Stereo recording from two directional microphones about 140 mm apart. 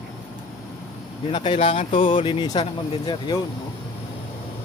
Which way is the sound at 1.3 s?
40° left (ahead or behind).